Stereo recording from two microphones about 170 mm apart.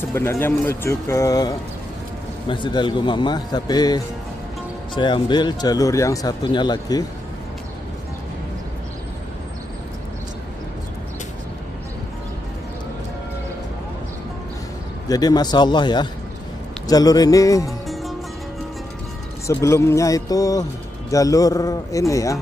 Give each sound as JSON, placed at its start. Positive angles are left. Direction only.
{"t": 0.1, "sound": "speech", "side_deg": 15}
{"t": 15.0, "sound": "speech", "side_deg": 20}
{"t": 19.4, "sound": "speech", "side_deg": 15}